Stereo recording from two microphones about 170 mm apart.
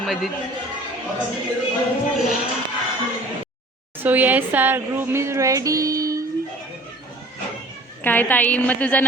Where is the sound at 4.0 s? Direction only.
10° right (ahead or behind).